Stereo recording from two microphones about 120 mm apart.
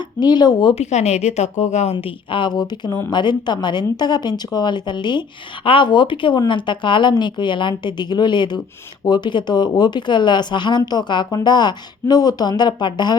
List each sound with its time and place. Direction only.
0.0 s speech: 35° left (ahead or behind)
0.8 s speech: 65° left (ahead or behind); by 13.1 s 35° left (ahead or behind)